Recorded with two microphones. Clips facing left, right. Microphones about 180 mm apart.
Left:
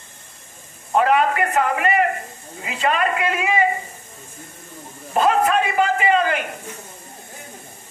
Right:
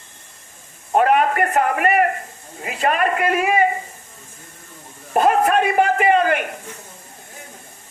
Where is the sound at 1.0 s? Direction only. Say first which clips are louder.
Right 1 dB; 50° right (ahead or behind).